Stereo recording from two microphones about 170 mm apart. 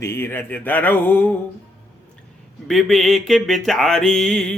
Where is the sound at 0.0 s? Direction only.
15° left (ahead or behind).